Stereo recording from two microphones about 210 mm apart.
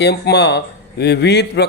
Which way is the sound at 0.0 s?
50° left (ahead or behind).